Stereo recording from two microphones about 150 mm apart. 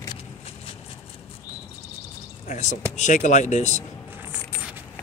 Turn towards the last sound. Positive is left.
turn(degrees=50)  # may be behind; listen again after turning